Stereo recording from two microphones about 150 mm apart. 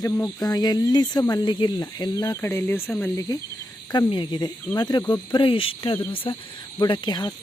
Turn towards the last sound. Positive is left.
turn(degrees=30)  # may be behind; listen again after turning